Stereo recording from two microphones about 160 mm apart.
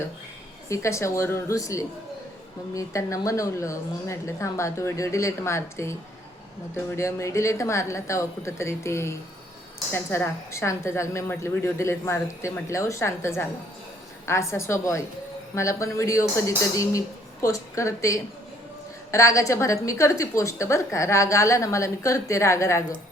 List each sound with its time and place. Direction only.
0.7 s a woman's voice: 20° left (ahead or behind)